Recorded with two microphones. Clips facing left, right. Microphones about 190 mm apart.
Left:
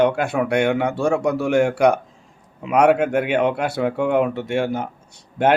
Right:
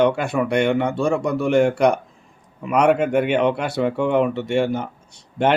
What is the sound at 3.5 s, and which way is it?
Speech, 55° left (ahead or behind).